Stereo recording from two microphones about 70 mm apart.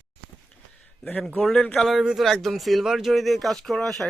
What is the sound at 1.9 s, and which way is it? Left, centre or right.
Speech, centre.